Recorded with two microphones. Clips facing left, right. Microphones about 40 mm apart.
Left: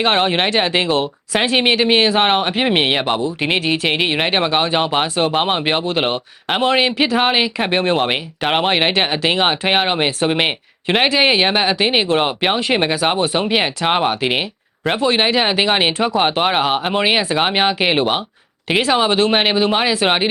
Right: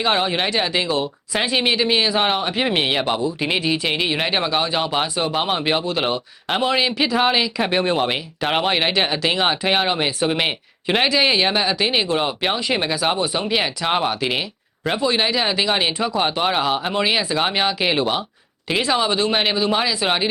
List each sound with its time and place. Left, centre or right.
0.0 s speech: left
2.6 s speech: centre